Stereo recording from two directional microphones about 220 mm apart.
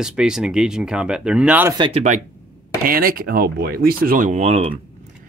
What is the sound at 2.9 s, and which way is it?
Speech, 40° right (ahead or behind).